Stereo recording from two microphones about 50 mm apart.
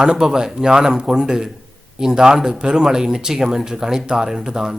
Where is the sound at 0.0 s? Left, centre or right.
Centre.